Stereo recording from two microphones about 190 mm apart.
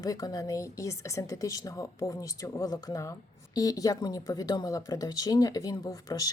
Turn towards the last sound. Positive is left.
turn(degrees=20)  # may be behind; listen again after turning